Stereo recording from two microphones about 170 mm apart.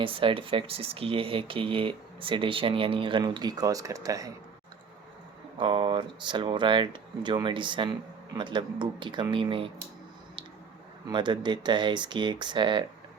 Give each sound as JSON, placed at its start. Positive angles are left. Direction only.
{"t": 0.0, "sound": "speech", "side_deg": -30}
{"t": 5.5, "sound": "speech", "side_deg": -30}
{"t": 11.1, "sound": "speech", "side_deg": -25}